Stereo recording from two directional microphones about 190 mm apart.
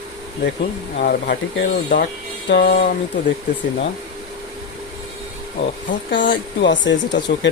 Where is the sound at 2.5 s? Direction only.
55° left (ahead or behind).